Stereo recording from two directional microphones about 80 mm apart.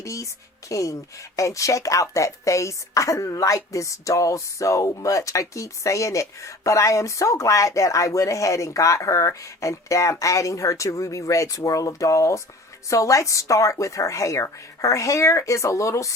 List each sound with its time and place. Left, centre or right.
0.0 s music: left
0.7 s a woman's voice: left